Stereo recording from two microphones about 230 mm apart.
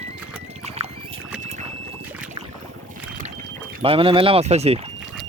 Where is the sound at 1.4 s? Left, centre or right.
Right.